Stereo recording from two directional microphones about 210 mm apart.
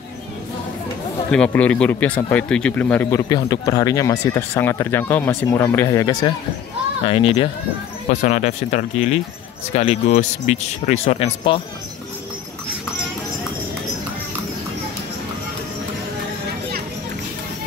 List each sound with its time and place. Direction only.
1.3 s speech: 5° left (ahead or behind); by 11.6 s 25° left (ahead or behind)